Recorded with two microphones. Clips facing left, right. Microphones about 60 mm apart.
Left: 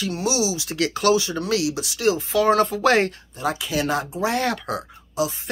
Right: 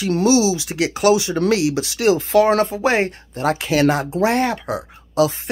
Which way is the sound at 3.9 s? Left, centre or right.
Right.